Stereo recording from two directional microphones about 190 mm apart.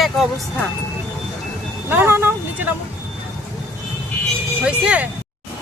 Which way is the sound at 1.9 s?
10° right (ahead or behind).